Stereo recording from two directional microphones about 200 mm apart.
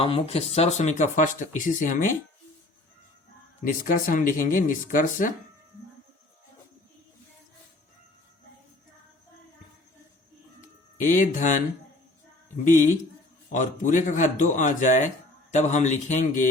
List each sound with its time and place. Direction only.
0.0 s speech: 30° left (ahead or behind)
3.6 s speech: 40° left (ahead or behind)
11.0 s speech: 40° left (ahead or behind)
13.5 s speech: 40° left (ahead or behind)